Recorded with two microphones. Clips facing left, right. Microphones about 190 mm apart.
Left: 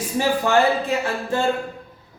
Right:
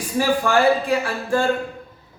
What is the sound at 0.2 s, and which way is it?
Speech, 25° left (ahead or behind).